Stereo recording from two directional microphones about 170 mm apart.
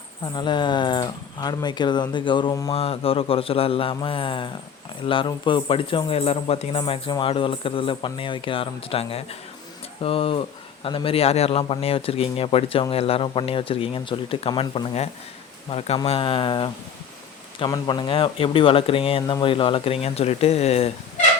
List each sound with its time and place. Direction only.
0.3 s speech: 25° left (ahead or behind)
2.7 s speech: 35° left (ahead or behind)
17.7 s speech: 25° left (ahead or behind)